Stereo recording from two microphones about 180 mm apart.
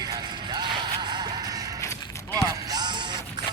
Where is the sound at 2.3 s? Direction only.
20° right (ahead or behind).